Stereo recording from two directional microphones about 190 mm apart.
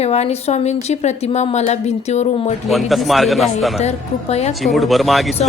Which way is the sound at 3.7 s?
35° left (ahead or behind).